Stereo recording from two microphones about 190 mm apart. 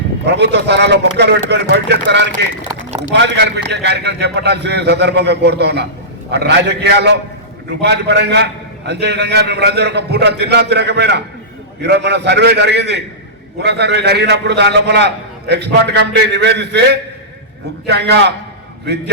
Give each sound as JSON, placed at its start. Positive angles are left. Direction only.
{"t": 0.3, "sound": "a man's voice", "side_deg": -60}